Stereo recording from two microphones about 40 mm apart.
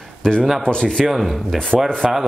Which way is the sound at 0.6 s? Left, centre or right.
Left.